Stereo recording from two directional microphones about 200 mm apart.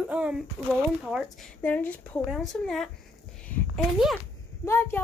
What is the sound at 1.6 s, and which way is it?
A woman's voice, 10° left (ahead or behind).